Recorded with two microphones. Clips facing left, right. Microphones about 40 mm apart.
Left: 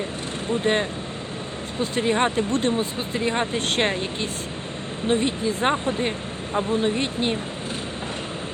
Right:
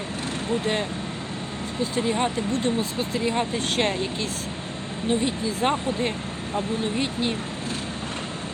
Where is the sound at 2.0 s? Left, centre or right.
Left.